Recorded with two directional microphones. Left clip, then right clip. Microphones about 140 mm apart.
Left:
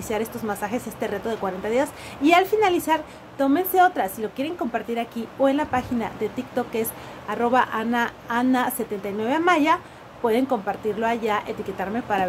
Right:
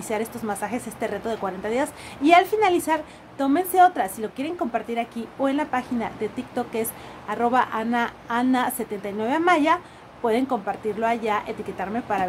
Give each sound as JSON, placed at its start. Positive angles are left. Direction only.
{"t": 0.1, "sound": "a woman's voice", "side_deg": -5}